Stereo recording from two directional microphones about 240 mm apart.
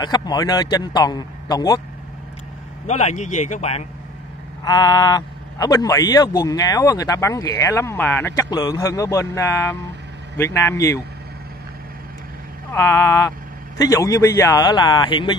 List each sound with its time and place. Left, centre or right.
0.0 s a man's voice: centre
2.9 s a man's voice: left
4.6 s a man's voice: centre
12.7 s a man's voice: centre